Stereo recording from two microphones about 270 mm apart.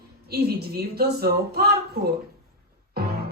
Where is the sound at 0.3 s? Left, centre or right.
Right.